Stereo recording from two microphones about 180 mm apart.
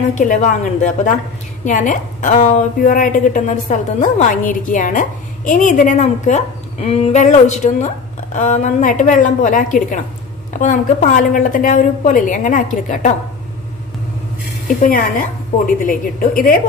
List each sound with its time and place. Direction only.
0.1 s a woman's voice: 45° left (ahead or behind)
11.1 s a woman's voice: 45° left (ahead or behind)
14.8 s a woman's voice: 50° left (ahead or behind)